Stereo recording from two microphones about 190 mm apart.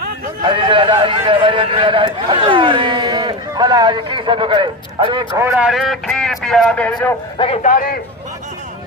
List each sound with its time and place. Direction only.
0.4 s a man's voice: 25° right (ahead or behind)
5.3 s speech: 10° right (ahead or behind)
5.7 s speech: centre (ahead or behind)
7.3 s a man's voice: 30° left (ahead or behind)
7.7 s a man's voice: 50° left (ahead or behind)